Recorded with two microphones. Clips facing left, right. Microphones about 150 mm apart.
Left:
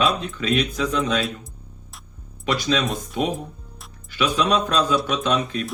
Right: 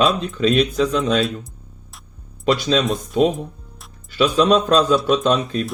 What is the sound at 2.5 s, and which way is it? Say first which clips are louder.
Speech: right 5 dB; 35° right (ahead or behind).